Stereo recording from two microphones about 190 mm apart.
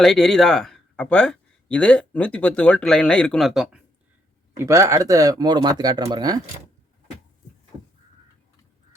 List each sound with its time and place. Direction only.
0.0 s speech: centre (ahead or behind)
4.5 s speech: 15° right (ahead or behind)